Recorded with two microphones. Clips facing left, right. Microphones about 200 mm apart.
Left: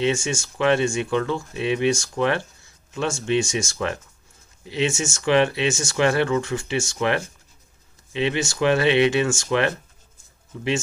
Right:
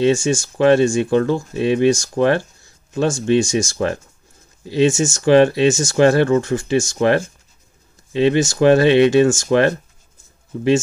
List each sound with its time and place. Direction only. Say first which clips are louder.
0.0 s speech: right 7 dB; 35° right (ahead or behind)